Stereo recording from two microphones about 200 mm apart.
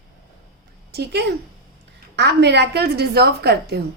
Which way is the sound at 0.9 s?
55° right (ahead or behind).